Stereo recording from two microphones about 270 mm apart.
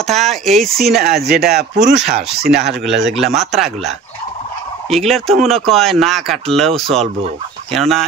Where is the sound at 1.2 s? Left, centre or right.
Right.